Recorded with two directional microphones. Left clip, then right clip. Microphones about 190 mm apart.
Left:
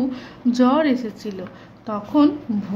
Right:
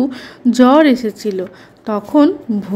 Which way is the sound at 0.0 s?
30° right (ahead or behind).